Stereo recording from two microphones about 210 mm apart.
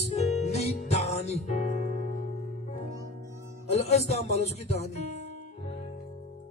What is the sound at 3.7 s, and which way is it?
Speech, 30° left (ahead or behind).